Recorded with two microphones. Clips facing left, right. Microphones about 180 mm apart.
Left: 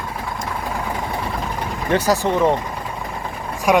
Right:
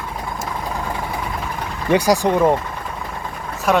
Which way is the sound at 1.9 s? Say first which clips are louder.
Right 3 dB; 15° right (ahead or behind).